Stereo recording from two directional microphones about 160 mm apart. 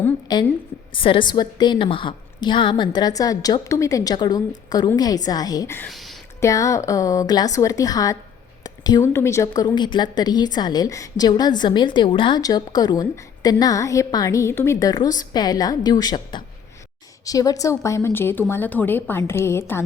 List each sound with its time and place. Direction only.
0.3 s a woman's voice: 25° left (ahead or behind)
5.9 s a sound: centre (ahead or behind)
6.4 s a woman's voice: 20° left (ahead or behind)
9.5 s a woman's voice: 30° left (ahead or behind)